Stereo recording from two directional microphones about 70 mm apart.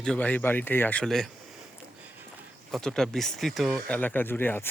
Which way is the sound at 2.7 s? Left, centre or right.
Centre.